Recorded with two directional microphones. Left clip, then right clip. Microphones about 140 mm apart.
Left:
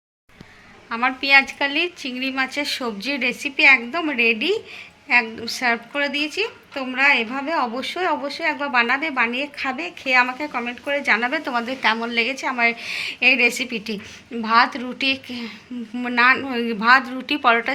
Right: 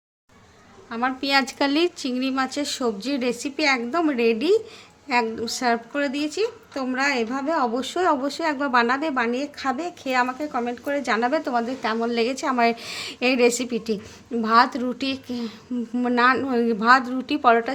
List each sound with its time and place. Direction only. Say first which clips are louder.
0.9 s a woman's voice: left 6 dB; 40° right (ahead or behind)
7.8 s a woman's voice: right 1 dB; 65° right (ahead or behind); by 17.7 s 45° right (ahead or behind)